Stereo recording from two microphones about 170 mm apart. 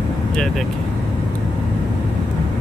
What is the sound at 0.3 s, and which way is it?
Speech, 5° left (ahead or behind).